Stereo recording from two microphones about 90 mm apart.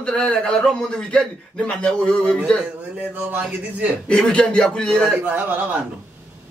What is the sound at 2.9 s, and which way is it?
Speech, 15° right (ahead or behind).